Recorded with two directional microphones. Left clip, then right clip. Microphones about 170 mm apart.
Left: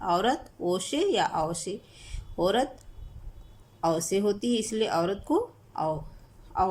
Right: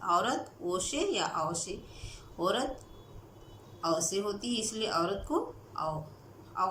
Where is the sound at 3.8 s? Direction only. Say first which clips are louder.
Left 5 dB; 45° left (ahead or behind).